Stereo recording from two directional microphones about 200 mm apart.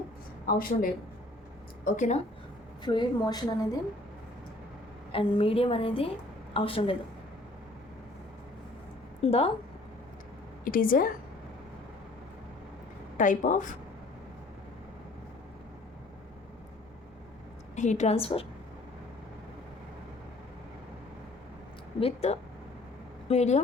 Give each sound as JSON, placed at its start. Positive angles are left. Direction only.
{"t": 0.4, "sound": "a woman's voice", "side_deg": 45}
{"t": 2.8, "sound": "a woman's voice", "side_deg": 20}
{"t": 5.1, "sound": "a woman's voice", "side_deg": 25}
{"t": 9.2, "sound": "a woman's voice", "side_deg": 30}
{"t": 10.6, "sound": "a woman's voice", "side_deg": 45}
{"t": 13.1, "sound": "a woman's voice", "side_deg": 40}
{"t": 17.7, "sound": "a woman's voice", "side_deg": 35}
{"t": 22.0, "sound": "a woman's voice", "side_deg": 35}